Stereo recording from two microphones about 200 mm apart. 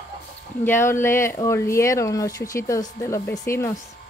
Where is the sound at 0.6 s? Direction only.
10° left (ahead or behind).